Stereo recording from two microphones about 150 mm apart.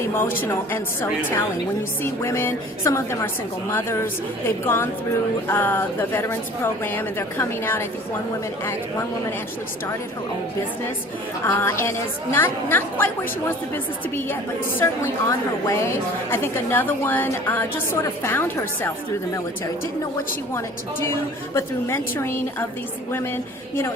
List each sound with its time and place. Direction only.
0.1 s a woman's voice: 15° left (ahead or behind)
2.2 s a woman's voice: 15° left (ahead or behind)
11.4 s a woman's voice: 15° left (ahead or behind)
14.8 s a woman's voice: 15° left (ahead or behind)
21.5 s a woman's voice: 15° left (ahead or behind)